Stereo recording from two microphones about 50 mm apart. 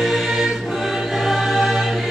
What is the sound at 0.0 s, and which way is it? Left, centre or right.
Music, centre.